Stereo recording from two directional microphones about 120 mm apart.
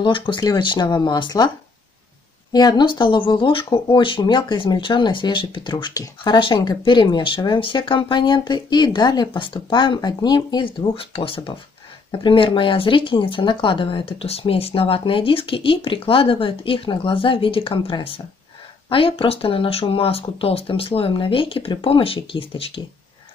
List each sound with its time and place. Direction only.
0.0 s speech: 40° left (ahead or behind)
2.5 s speech: 35° left (ahead or behind); by 22.7 s 50° left (ahead or behind)